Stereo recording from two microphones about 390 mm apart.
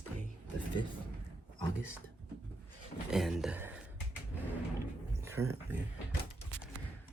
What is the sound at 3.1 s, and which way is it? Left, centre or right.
Speech, centre.